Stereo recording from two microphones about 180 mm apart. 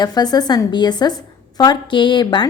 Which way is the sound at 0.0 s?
20° left (ahead or behind).